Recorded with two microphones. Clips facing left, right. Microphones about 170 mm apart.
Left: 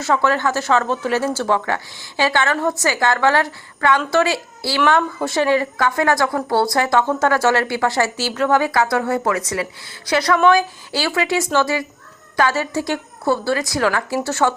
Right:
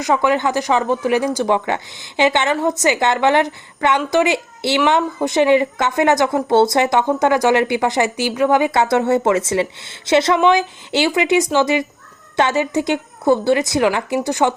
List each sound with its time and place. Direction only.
0.0 s a woman's voice: 15° right (ahead or behind)